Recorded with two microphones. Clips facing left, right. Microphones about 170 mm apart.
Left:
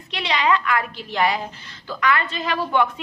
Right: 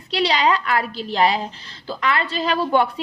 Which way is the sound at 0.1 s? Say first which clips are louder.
Right 2 dB; 35° right (ahead or behind).